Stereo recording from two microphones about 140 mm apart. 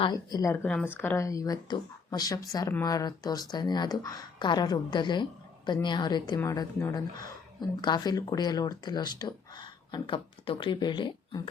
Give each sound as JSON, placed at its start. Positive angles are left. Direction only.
{"t": 0.0, "sound": "speech", "side_deg": 30}
{"t": 0.5, "sound": "speech", "side_deg": 10}
{"t": 6.4, "sound": "speech", "side_deg": 20}